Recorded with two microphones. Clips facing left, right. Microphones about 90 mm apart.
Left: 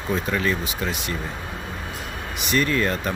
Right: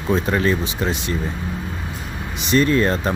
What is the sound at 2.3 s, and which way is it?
Speech, 25° right (ahead or behind).